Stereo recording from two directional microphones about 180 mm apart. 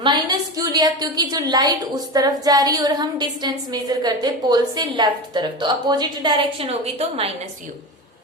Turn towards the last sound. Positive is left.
turn(degrees=-35)  # may be behind; listen again after turning